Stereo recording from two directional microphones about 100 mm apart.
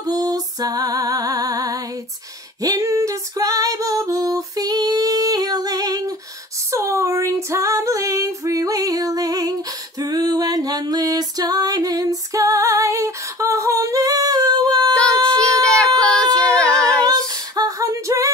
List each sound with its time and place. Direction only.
0.0 s music: 40° right (ahead or behind)
2.6 s female singing: 35° right (ahead or behind)
6.7 s female singing: 30° right (ahead or behind)
16.0 s a sound: 10° left (ahead or behind)
16.3 s female singing: 10° left (ahead or behind)
17.0 s female singing: 40° right (ahead or behind)